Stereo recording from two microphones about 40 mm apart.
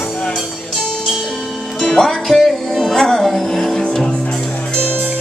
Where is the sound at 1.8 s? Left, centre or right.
Centre.